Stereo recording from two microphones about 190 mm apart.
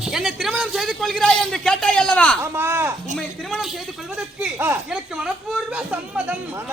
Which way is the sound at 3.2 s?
Centre (ahead or behind).